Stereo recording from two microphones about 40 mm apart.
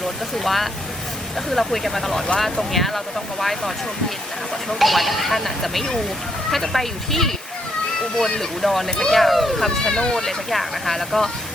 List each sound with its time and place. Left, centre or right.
0.3 s speech: centre
4.7 s speech: centre
9.2 s speech: centre
9.6 s speech: centre
10.2 s speech: centre